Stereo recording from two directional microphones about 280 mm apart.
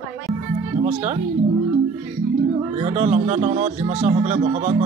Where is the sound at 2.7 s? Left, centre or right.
Right.